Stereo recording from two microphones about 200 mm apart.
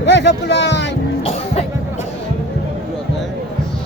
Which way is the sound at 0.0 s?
60° left (ahead or behind).